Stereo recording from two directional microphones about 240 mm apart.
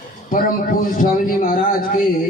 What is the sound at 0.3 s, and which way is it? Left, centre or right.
A man's voice, left.